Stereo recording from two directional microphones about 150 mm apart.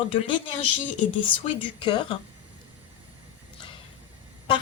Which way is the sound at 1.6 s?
30° left (ahead or behind).